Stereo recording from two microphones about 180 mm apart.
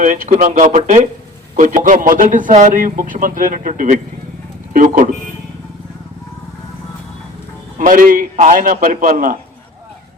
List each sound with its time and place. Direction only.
0.0 s speech: 45° right (ahead or behind)
4.7 s vehicle: 45° right (ahead or behind)
7.8 s speech: 50° right (ahead or behind)